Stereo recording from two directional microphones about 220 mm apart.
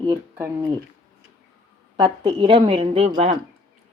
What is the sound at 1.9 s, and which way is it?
A woman's voice, 20° right (ahead or behind).